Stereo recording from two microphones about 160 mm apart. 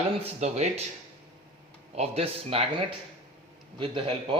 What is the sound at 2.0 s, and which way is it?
Speech, 40° right (ahead or behind).